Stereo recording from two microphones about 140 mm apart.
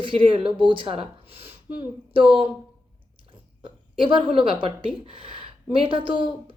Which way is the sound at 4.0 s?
40° right (ahead or behind).